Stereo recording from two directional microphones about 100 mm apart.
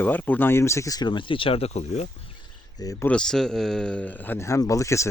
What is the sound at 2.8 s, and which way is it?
Speech, 40° left (ahead or behind).